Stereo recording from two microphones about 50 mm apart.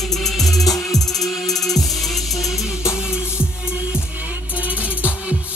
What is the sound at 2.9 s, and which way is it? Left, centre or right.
Music, centre.